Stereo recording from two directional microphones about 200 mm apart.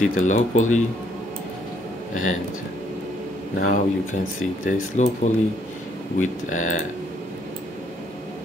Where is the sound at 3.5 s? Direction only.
45° left (ahead or behind).